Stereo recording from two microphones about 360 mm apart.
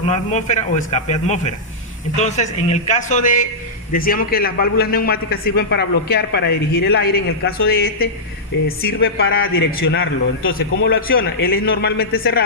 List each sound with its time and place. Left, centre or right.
0.0 s a man's voice: centre